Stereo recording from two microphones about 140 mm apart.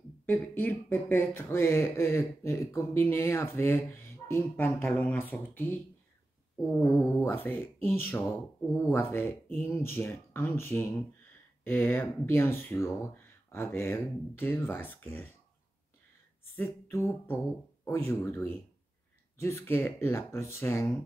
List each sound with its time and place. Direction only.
0.3 s speech: 15° left (ahead or behind)
6.8 s speech: 20° left (ahead or behind)
16.5 s speech: 15° left (ahead or behind)